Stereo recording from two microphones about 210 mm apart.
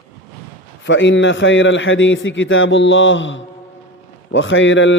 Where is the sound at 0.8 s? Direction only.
60° left (ahead or behind).